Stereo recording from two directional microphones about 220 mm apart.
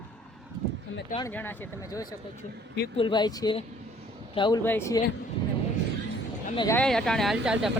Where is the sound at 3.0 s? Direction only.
20° left (ahead or behind).